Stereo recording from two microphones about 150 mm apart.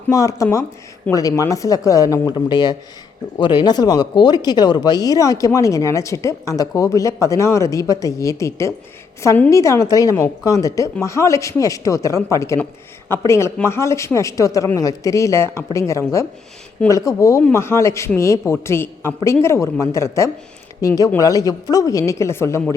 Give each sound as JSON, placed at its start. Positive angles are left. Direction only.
{"t": 0.1, "sound": "speech", "side_deg": 20}